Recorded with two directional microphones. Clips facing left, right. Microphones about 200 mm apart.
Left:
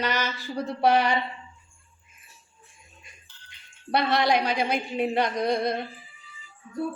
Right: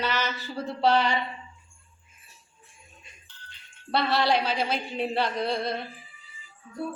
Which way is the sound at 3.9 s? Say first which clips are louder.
Left 1 dB; 15° left (ahead or behind).